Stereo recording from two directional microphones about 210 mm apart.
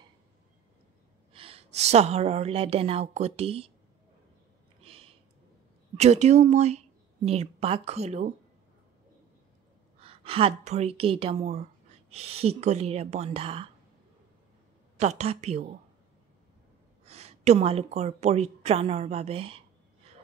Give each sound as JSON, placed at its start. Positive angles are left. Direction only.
{"t": 1.3, "sound": "a woman's voice", "side_deg": -25}
{"t": 4.8, "sound": "a sound", "side_deg": -25}
{"t": 5.9, "sound": "a woman's voice", "side_deg": -30}
{"t": 9.9, "sound": "a woman's voice", "side_deg": -25}
{"t": 15.0, "sound": "a woman's voice", "side_deg": -30}
{"t": 17.0, "sound": "a woman's voice", "side_deg": -30}